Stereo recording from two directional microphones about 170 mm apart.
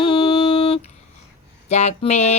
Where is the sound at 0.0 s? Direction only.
30° left (ahead or behind).